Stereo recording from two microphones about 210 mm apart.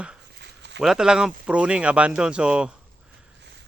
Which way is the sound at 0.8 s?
5° right (ahead or behind).